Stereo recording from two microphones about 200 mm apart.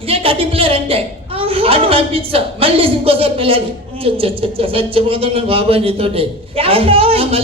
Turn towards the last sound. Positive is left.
turn(degrees=-30)  # may be behind; listen again after turning